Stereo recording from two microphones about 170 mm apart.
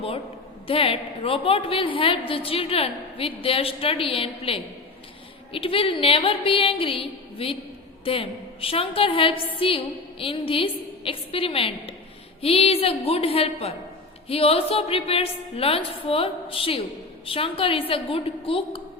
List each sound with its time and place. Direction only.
0.7 s a woman's voice: 35° left (ahead or behind)